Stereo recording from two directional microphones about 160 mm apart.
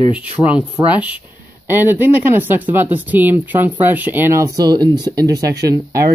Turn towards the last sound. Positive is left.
turn(degrees=-20)  # may be behind; listen again after turning